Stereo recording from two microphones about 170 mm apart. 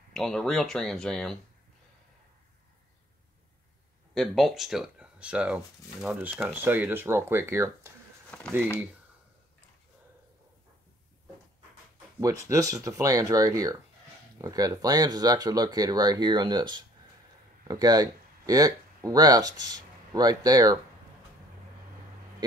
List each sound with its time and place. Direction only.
0.1 s speech: centre (ahead or behind)
4.1 s speech: centre (ahead or behind); by 7.9 s 15° right (ahead or behind)
8.3 s a sound: 10° left (ahead or behind)
12.2 s speech: 20° right (ahead or behind)